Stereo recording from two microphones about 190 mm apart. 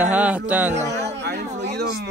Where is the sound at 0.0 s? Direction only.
5° right (ahead or behind).